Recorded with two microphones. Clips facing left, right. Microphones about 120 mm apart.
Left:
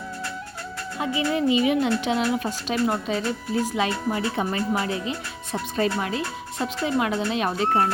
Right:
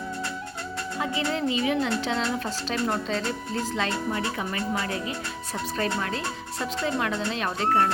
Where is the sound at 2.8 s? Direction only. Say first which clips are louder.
Left 3 dB; 10° left (ahead or behind).